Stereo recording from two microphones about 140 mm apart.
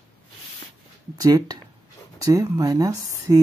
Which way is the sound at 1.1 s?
25° right (ahead or behind).